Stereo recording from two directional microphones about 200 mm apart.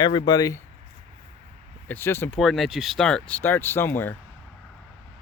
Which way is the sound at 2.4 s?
Centre (ahead or behind).